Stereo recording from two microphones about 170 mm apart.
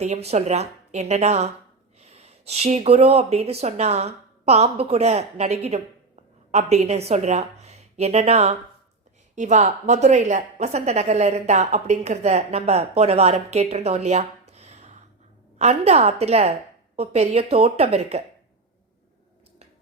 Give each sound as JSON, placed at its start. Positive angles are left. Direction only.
{"t": 0.0, "sound": "a woman's voice", "side_deg": -40}
{"t": 14.5, "sound": "a sound", "side_deg": -40}
{"t": 15.5, "sound": "a woman's voice", "side_deg": -40}